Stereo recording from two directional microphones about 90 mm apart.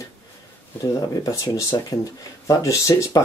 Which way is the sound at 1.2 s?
40° left (ahead or behind).